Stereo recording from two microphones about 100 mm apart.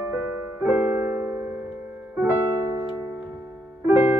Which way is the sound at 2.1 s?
20° right (ahead or behind).